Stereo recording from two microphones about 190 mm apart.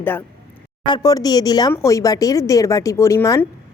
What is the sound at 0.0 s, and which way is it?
A woman's voice, 10° left (ahead or behind).